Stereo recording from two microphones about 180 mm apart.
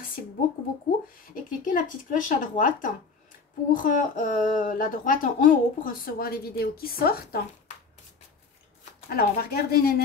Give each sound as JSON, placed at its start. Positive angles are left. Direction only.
{"t": 1.3, "sound": "speech", "side_deg": 45}
{"t": 9.1, "sound": "speech", "side_deg": 55}